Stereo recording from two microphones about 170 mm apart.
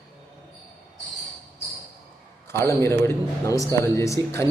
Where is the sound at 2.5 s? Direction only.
15° left (ahead or behind).